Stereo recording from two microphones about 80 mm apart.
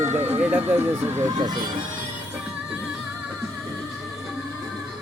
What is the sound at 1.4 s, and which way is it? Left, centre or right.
Speech, right.